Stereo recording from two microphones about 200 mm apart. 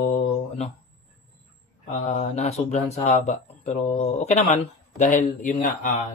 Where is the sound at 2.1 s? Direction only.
35° left (ahead or behind).